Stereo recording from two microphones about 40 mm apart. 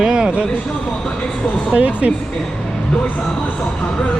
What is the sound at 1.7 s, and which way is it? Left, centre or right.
Speech, right.